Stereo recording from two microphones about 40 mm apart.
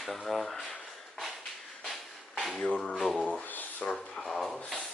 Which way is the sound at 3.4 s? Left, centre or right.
Left.